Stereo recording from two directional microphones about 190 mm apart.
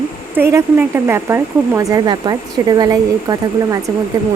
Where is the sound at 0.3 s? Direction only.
10° right (ahead or behind).